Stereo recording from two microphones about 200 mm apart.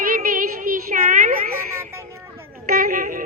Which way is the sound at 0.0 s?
45° right (ahead or behind).